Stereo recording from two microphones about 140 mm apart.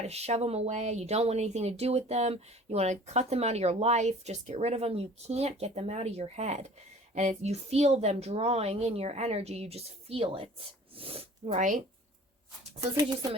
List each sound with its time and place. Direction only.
0.0 s speech: 50° right (ahead or behind)